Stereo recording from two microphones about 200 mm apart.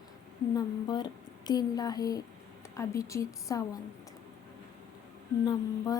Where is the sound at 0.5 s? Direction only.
20° left (ahead or behind).